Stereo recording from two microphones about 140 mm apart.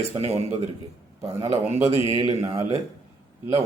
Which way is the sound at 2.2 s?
25° right (ahead or behind).